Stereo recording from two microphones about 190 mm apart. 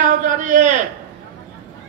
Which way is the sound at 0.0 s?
45° right (ahead or behind).